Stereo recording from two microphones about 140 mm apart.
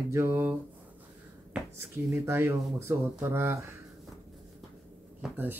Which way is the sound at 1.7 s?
20° right (ahead or behind).